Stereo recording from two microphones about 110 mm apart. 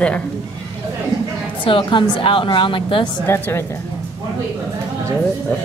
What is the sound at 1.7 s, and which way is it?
A woman's voice, 50° left (ahead or behind).